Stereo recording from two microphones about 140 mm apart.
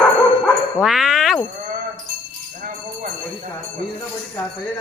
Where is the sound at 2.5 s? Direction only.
70° right (ahead or behind).